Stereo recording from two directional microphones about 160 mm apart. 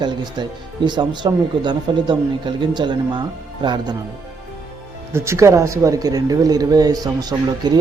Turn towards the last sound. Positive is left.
turn(degrees=-25)  # may be behind; listen again after turning